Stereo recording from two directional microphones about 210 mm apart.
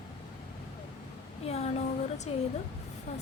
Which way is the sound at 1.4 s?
30° left (ahead or behind).